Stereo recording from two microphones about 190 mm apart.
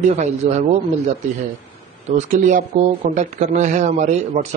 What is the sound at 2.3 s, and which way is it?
Speech, 40° right (ahead or behind).